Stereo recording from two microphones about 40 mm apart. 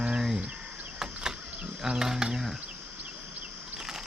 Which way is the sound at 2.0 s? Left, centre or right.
Centre.